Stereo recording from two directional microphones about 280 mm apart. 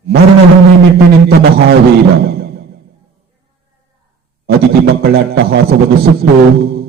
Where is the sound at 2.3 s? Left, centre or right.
Right.